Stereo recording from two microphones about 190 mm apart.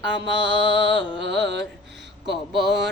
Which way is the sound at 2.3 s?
Centre (ahead or behind).